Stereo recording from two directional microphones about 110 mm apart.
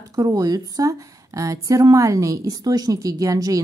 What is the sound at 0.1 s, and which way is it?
A woman's voice, 35° right (ahead or behind).